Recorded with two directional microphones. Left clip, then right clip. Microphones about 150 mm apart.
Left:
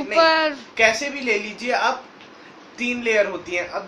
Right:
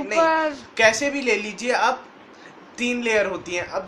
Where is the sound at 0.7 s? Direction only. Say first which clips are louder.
Right 1 dB; 60° right (ahead or behind).